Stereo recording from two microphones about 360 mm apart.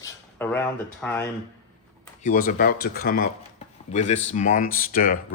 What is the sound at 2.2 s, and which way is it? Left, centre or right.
Speech, left.